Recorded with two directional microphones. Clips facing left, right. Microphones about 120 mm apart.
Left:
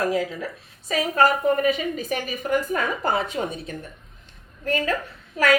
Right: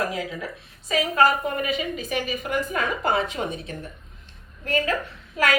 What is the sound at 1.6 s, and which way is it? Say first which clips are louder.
Speech: left 4 dB; 40° left (ahead or behind).